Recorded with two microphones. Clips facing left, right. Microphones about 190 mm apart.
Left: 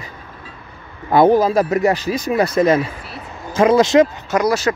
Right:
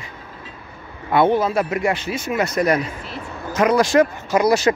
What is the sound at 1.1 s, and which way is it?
Speech, 40° left (ahead or behind).